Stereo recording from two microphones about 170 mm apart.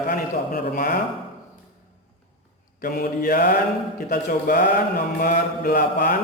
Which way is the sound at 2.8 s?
60° left (ahead or behind).